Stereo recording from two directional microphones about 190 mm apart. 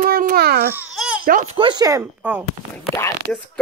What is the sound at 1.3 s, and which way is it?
Speech, 40° right (ahead or behind).